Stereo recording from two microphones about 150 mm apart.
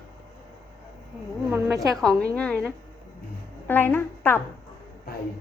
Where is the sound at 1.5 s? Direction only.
20° right (ahead or behind).